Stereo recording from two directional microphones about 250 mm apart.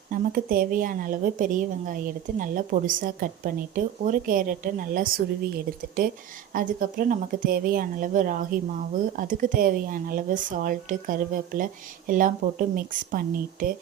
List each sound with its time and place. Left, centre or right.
0.1 s a woman's voice: right